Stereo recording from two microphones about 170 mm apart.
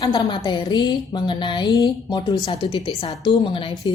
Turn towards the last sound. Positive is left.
turn(degrees=30)  # may be behind; listen again after turning